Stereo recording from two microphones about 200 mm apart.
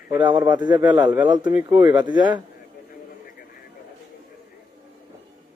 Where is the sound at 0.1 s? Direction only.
20° right (ahead or behind).